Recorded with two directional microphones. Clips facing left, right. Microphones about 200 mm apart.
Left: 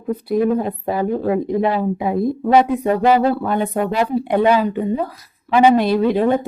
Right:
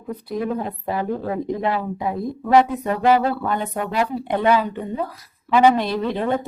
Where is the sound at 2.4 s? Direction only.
25° left (ahead or behind).